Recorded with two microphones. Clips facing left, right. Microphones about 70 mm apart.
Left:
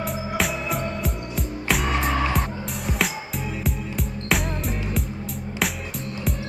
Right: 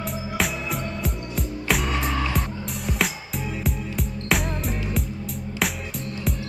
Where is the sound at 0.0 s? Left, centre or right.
Centre.